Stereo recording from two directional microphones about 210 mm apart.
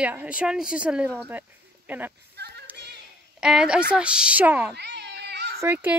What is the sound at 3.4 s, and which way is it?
A woman's voice, 5° right (ahead or behind).